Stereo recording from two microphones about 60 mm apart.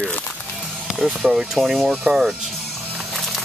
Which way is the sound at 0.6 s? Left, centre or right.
Centre.